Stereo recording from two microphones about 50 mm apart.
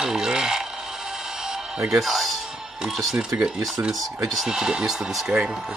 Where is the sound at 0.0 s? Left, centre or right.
Centre.